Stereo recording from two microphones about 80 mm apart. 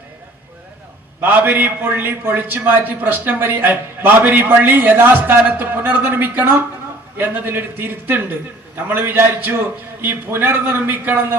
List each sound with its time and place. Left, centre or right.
1.2 s a man's voice: right